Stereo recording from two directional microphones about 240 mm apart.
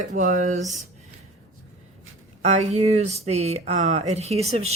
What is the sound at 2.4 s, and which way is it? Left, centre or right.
Speech, right.